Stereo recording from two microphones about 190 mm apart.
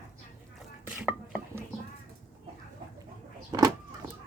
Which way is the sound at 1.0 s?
5° right (ahead or behind).